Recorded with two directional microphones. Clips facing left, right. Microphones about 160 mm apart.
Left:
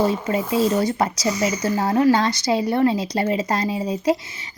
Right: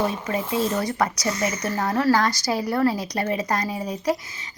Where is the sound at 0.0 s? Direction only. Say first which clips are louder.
Left 4 dB; 25° left (ahead or behind).